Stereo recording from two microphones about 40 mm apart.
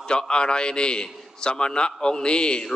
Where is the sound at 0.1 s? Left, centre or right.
Left.